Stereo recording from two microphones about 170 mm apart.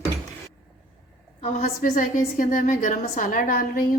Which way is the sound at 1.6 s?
50° left (ahead or behind).